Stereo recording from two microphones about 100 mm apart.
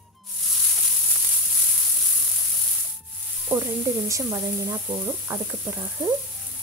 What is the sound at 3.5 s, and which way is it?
Speech, 30° right (ahead or behind).